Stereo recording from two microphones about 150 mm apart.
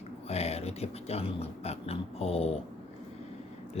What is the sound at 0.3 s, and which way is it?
Speech, 45° left (ahead or behind).